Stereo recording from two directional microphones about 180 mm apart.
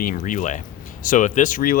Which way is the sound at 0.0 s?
50° left (ahead or behind).